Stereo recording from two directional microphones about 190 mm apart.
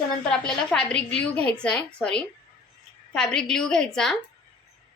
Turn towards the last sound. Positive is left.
turn(degrees=5)  # may be behind; listen again after turning